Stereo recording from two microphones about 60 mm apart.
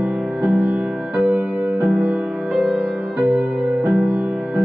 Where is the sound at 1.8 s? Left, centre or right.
Centre.